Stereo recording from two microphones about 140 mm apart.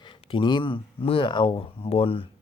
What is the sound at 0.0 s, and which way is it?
Speech, 35° left (ahead or behind).